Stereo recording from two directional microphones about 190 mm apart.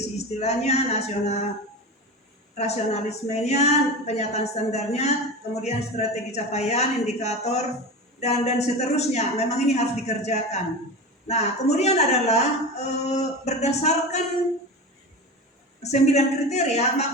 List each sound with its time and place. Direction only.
0.2 s a woman's voice: 35° left (ahead or behind)
2.6 s a woman's voice: 35° left (ahead or behind)
15.8 s a woman's voice: 35° left (ahead or behind)